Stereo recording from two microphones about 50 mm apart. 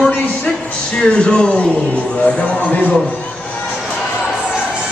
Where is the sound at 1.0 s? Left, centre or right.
Centre.